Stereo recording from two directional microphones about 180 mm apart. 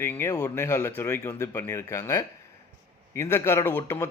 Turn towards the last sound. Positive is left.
turn(degrees=10)  # may be behind; listen again after turning